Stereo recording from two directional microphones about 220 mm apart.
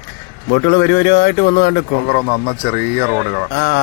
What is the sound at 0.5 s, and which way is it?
A man's voice, 50° left (ahead or behind).